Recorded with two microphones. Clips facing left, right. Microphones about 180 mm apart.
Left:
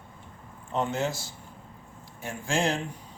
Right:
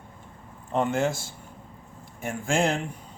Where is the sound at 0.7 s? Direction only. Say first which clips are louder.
Right 4 dB; 55° right (ahead or behind).